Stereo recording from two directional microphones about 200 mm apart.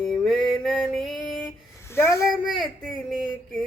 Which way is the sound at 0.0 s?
Centre (ahead or behind).